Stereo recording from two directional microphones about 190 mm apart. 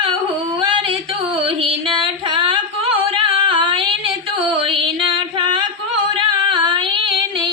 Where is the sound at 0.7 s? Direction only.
25° right (ahead or behind).